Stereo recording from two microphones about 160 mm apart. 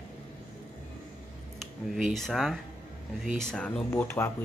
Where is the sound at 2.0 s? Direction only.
Centre (ahead or behind).